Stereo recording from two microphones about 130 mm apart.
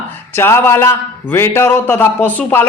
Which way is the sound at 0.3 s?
20° left (ahead or behind).